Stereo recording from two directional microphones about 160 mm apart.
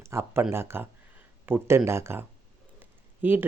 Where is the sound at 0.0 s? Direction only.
15° right (ahead or behind).